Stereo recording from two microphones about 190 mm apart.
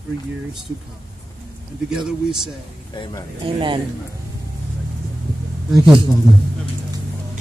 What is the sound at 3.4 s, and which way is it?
Speech, 25° right (ahead or behind).